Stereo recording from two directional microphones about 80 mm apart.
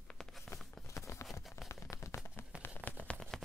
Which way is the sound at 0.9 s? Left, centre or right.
Left.